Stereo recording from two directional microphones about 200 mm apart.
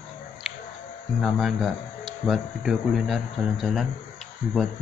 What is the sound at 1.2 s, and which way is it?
Speech, centre (ahead or behind).